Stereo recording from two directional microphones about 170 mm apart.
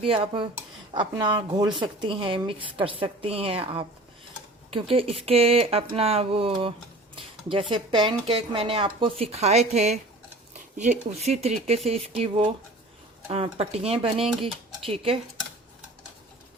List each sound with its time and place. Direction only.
0.0 s speech: 30° right (ahead or behind)
7.2 s a sound: 30° right (ahead or behind)
7.7 s speech: 30° right (ahead or behind)
11.1 s speech: 40° right (ahead or behind)